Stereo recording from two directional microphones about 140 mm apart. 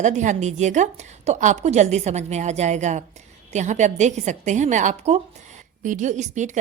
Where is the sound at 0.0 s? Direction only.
60° right (ahead or behind).